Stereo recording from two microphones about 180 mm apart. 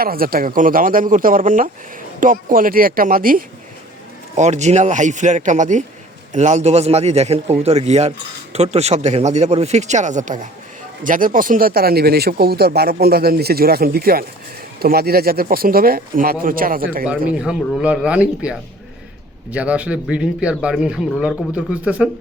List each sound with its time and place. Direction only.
0.0 s speech: 55° right (ahead or behind)
4.4 s speech: 40° right (ahead or behind)
17.3 s speech: 5° right (ahead or behind)